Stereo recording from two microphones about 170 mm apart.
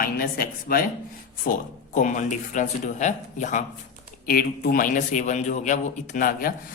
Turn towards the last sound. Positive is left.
turn(degrees=55)  # may be behind; listen again after turning